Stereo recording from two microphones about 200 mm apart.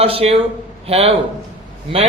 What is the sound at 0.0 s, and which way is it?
A man's voice, 30° right (ahead or behind).